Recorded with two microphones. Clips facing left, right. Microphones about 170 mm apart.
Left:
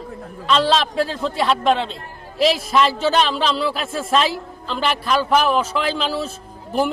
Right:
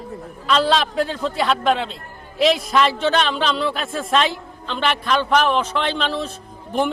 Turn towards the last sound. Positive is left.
turn(degrees=5)  # may be behind; listen again after turning